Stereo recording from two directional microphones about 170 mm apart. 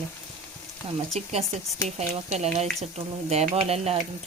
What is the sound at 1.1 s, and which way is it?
Speech, 40° right (ahead or behind).